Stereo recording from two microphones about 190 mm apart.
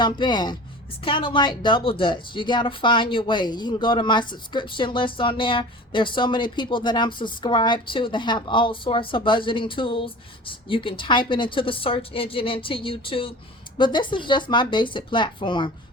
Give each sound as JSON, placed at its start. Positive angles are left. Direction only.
{"t": 0.0, "sound": "speech", "side_deg": 25}